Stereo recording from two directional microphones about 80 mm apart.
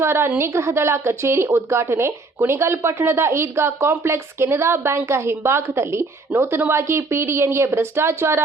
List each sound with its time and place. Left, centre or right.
0.0 s speech: right